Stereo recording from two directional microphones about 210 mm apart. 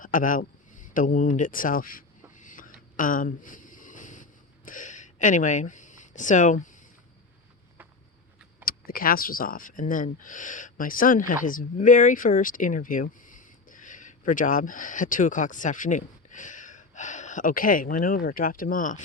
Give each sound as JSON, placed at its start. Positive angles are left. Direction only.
{"t": 0.0, "sound": "speech", "side_deg": 40}
{"t": 2.4, "sound": "a sound", "side_deg": 40}
{"t": 8.6, "sound": "speech", "side_deg": 45}